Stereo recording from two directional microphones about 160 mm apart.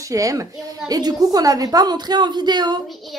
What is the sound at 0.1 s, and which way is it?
A woman's voice, 20° right (ahead or behind).